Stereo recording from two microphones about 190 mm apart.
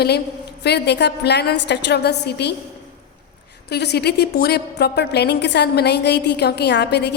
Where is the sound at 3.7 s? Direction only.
60° left (ahead or behind).